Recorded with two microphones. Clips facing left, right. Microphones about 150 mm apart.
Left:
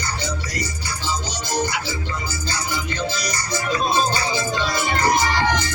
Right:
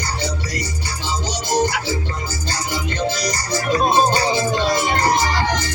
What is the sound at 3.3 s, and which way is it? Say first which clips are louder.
Music: right 4 dB; 40° right (ahead or behind).